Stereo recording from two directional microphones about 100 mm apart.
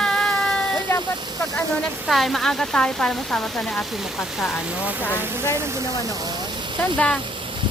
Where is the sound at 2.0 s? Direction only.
Centre (ahead or behind).